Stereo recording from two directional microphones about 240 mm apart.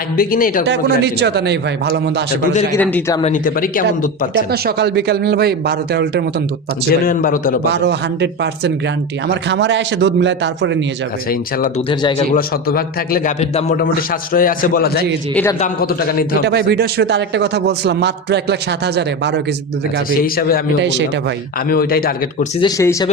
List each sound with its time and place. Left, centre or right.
0.2 s a man's voice: left
0.6 s a man's voice: right
2.7 s a man's voice: centre
3.2 s a man's voice: left
4.5 s speech: right
7.0 s a man's voice: left
7.7 s a man's voice: right
11.3 s a man's voice: left
16.5 s a man's voice: right
20.2 s a man's voice: left
20.7 s a man's voice: right
21.7 s a man's voice: left
22.6 s a man's voice: centre